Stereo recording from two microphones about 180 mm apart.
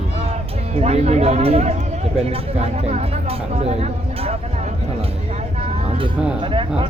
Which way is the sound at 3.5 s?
35° right (ahead or behind).